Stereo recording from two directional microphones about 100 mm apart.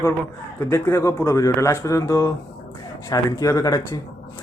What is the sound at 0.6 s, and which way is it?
Speech, 25° left (ahead or behind).